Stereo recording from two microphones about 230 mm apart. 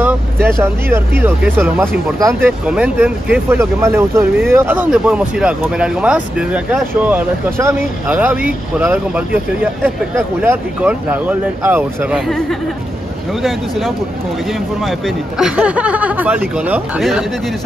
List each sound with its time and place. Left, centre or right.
0.0 s speech: centre